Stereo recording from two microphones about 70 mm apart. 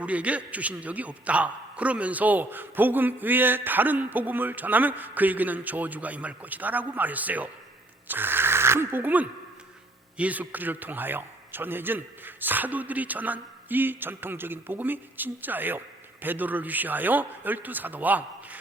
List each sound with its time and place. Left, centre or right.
0.0 s a man's voice: centre